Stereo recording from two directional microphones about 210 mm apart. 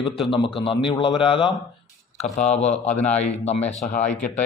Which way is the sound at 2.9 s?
5° left (ahead or behind).